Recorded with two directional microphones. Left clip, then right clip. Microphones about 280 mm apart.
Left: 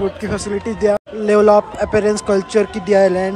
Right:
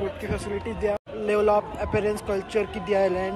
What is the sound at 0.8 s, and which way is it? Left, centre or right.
Speech, centre.